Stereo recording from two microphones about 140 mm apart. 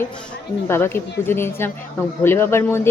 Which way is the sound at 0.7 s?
15° left (ahead or behind).